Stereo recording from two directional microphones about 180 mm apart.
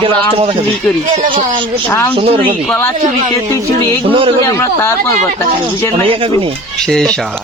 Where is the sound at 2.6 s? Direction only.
10° left (ahead or behind).